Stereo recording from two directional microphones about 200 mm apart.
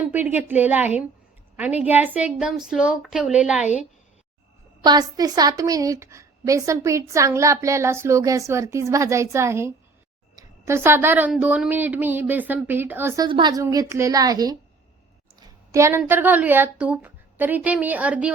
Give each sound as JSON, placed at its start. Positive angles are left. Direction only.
{"t": 0.1, "sound": "a woman's voice", "side_deg": -10}
{"t": 4.8, "sound": "a woman's voice", "side_deg": -20}
{"t": 13.2, "sound": "a woman's voice", "side_deg": -20}